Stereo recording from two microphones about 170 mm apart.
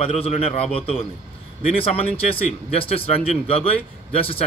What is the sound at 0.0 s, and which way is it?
A man's voice, 35° left (ahead or behind).